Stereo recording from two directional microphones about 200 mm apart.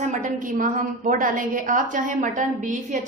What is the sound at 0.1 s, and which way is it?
A woman's voice, 40° right (ahead or behind).